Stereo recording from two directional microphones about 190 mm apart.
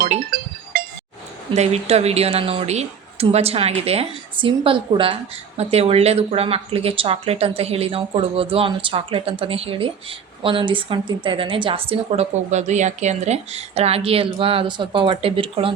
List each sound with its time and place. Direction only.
0.7 s chink: 50° right (ahead or behind)
1.5 s speech: 35° right (ahead or behind)